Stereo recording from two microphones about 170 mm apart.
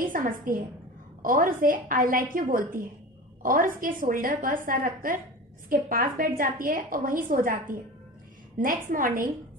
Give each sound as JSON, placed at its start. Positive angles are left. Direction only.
{"t": 0.0, "sound": "a woman's voice", "side_deg": -55}